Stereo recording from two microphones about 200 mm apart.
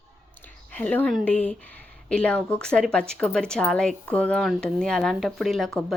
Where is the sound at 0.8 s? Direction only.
5° left (ahead or behind).